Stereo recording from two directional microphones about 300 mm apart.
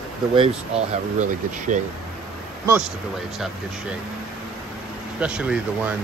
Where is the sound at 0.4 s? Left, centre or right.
Right.